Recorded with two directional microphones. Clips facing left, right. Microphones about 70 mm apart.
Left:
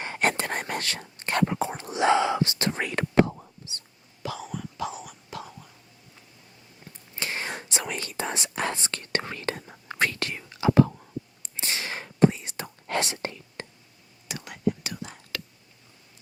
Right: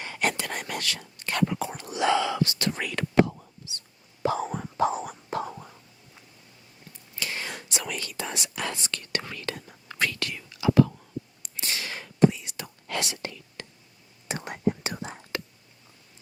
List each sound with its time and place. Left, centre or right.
0.0 s whispering: left
4.2 s whispering: right
7.2 s speech: left
11.4 s whispering: left
14.3 s whispering: right